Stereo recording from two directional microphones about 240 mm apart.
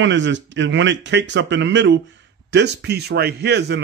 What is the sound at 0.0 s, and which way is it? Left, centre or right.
Speech, right.